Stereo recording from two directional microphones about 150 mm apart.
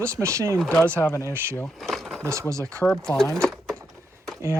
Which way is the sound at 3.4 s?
5° left (ahead or behind).